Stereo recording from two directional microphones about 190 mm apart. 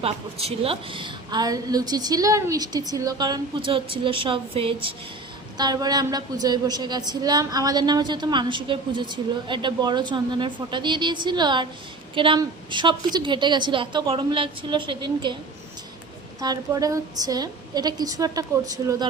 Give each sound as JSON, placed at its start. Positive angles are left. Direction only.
{"t": 0.0, "sound": "a woman's voice", "side_deg": -30}
{"t": 16.4, "sound": "a woman's voice", "side_deg": -20}